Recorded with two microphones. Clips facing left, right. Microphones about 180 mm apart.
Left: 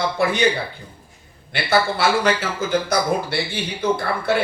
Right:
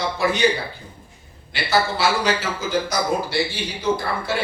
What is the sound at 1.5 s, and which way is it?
A man's voice, 60° left (ahead or behind).